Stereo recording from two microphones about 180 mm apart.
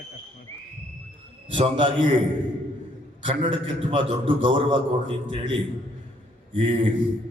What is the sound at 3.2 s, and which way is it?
A man's voice, 30° right (ahead or behind).